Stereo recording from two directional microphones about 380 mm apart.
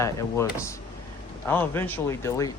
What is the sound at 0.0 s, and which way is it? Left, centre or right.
Speech, centre.